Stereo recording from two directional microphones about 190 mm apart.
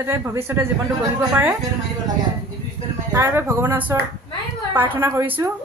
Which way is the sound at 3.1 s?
10° right (ahead or behind).